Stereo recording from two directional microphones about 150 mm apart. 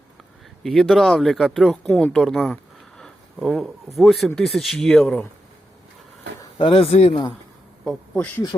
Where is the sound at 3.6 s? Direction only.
Centre (ahead or behind).